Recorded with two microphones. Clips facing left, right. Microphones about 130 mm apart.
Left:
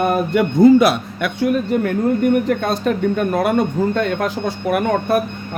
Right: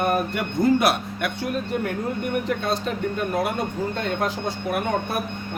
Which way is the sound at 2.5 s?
55° left (ahead or behind).